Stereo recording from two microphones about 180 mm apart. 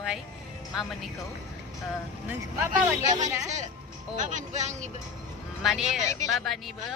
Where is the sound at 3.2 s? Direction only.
40° right (ahead or behind).